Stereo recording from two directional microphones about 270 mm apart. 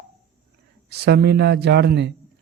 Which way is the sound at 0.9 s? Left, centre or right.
Right.